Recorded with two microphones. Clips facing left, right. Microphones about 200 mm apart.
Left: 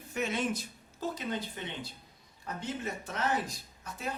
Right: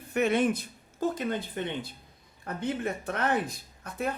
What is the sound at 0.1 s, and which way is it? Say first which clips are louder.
A man's voice: right 7 dB; 60° right (ahead or behind).